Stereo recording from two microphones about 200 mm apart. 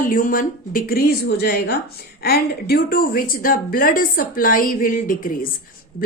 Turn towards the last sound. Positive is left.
turn(degrees=45)  # may be behind; listen again after turning